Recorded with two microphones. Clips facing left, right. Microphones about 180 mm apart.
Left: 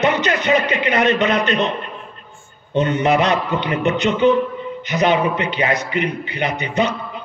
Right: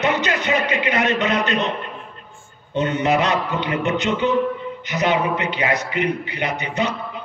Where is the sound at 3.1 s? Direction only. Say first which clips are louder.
Left 2 dB; 20° left (ahead or behind).